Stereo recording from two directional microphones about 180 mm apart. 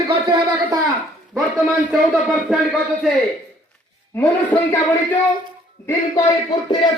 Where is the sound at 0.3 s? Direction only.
20° right (ahead or behind).